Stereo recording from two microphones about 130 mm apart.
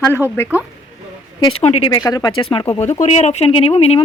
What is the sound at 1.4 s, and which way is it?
Speech, 35° left (ahead or behind).